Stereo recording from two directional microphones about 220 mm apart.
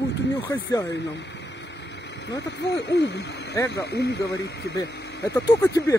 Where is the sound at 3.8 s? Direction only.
50° left (ahead or behind).